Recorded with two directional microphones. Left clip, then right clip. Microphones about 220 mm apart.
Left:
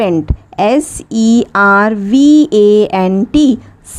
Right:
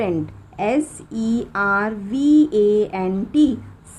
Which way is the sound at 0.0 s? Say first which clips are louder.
Left 9 dB; 40° left (ahead or behind).